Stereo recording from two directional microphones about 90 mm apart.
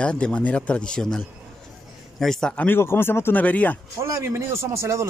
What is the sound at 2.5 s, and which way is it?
Speech, 20° left (ahead or behind).